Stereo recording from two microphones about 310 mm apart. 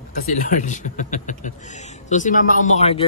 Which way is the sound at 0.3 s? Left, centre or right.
Left.